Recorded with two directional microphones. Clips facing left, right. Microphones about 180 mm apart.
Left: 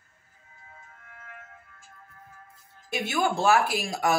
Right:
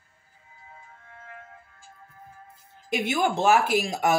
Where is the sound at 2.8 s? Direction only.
15° right (ahead or behind).